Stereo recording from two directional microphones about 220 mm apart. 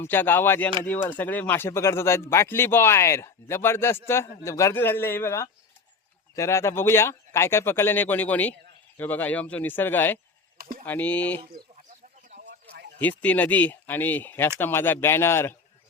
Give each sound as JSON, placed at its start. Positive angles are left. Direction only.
{"t": 0.0, "sound": "speech", "side_deg": 10}
{"t": 10.6, "sound": "a sound", "side_deg": -40}
{"t": 10.8, "sound": "speech", "side_deg": 5}
{"t": 13.0, "sound": "speech", "side_deg": 5}